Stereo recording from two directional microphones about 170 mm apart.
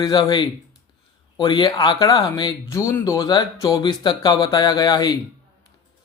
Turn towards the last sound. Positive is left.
turn(degrees=20)  # may be behind; listen again after turning